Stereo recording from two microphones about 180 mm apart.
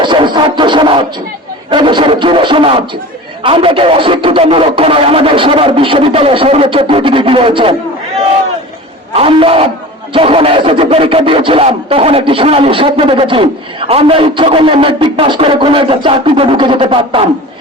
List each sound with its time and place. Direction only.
0.0 s music: 25° right (ahead or behind)
1.7 s a sound: 25° right (ahead or behind)
3.4 s speech: 30° right (ahead or behind)
9.1 s a man's voice: 30° right (ahead or behind)